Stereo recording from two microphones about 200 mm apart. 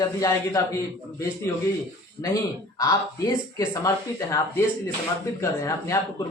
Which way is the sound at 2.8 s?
20° left (ahead or behind).